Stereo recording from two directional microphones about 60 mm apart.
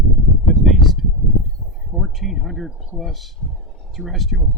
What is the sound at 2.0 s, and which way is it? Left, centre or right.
Speech, centre.